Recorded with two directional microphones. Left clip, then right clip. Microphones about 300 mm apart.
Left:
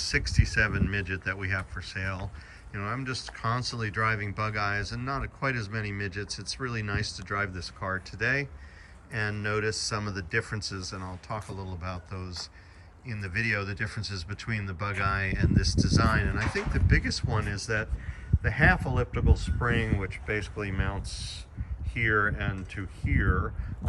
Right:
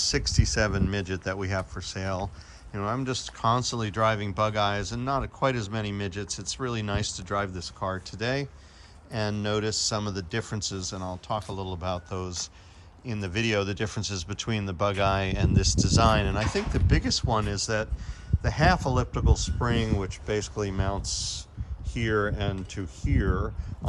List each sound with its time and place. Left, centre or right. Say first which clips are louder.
0.0 s speech: right 2 dB; centre
6.2 s speech: right 2 dB; centre
6.6 s speech: right 2 dB; centre
11.5 s speech: right 6 dB; centre
11.8 s speech: right 7 dB; centre